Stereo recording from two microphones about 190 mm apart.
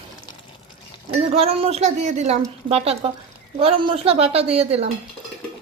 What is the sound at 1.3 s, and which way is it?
A woman's voice, 30° right (ahead or behind).